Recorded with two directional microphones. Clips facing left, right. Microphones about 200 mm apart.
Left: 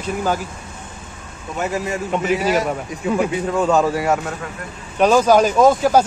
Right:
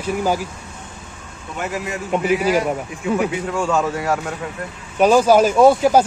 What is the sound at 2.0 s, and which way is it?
Speech, 10° right (ahead or behind).